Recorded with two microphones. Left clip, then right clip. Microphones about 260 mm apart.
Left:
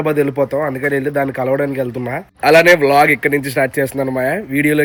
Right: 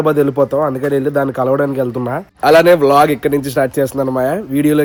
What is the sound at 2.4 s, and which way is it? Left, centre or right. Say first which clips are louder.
Speech: right 1 dB; centre.